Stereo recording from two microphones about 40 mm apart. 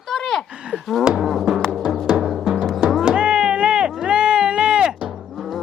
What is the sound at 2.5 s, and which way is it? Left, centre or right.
Music, centre.